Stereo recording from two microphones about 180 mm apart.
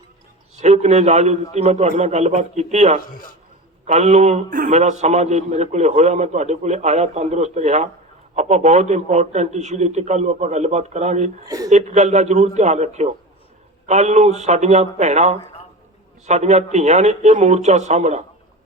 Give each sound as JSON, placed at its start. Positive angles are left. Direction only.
{"t": 0.6, "sound": "a man's voice", "side_deg": -40}
{"t": 11.4, "sound": "speech", "side_deg": -20}
{"t": 11.7, "sound": "a man's voice", "side_deg": -40}